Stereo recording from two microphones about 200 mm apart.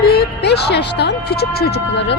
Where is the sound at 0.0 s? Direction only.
50° left (ahead or behind).